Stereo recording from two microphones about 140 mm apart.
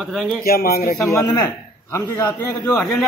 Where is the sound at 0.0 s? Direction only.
Centre (ahead or behind).